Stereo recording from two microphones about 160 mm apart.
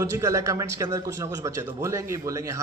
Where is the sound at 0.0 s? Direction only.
20° right (ahead or behind).